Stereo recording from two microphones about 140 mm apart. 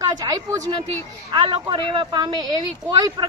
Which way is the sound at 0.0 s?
25° right (ahead or behind).